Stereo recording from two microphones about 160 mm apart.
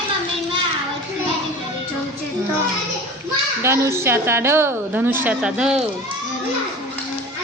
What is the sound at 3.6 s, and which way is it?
A woman's voice, 15° right (ahead or behind).